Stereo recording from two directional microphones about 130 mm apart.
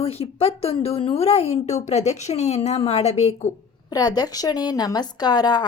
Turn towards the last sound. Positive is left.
turn(degrees=30)  # may be behind; listen again after turning